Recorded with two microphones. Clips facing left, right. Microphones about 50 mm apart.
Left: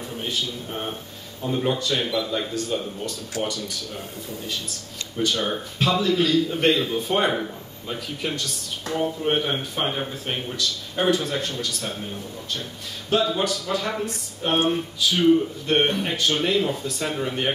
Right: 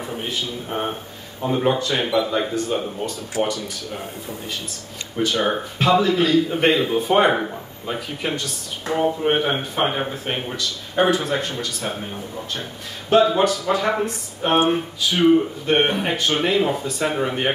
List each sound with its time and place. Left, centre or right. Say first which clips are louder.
0.0 s a sound: right 3 dB; right
0.3 s a man's voice: left 2 dB; centre
0.7 s speech: right 5 dB; right
5.2 s a man's voice: right 4 dB; centre
10.5 s a man's voice: right 2 dB; centre
13.4 s a man's voice: right 6 dB; centre